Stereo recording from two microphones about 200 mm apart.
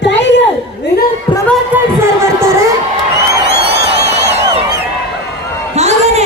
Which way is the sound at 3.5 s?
60° right (ahead or behind).